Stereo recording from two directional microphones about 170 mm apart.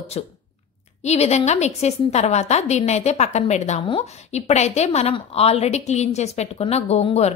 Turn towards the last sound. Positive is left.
turn(degrees=35)  # may be behind; listen again after turning